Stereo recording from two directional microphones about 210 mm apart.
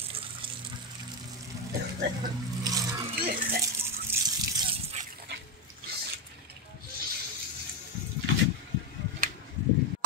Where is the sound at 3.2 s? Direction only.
45° right (ahead or behind).